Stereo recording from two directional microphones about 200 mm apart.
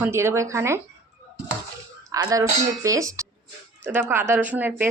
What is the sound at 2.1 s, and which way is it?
Speech, 15° right (ahead or behind).